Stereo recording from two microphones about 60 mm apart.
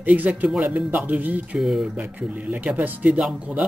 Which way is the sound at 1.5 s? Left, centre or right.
Centre.